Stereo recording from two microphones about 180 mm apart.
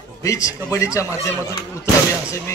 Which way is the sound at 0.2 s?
20° left (ahead or behind).